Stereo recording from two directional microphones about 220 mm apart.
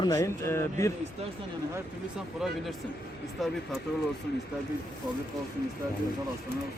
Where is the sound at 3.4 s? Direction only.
Centre (ahead or behind).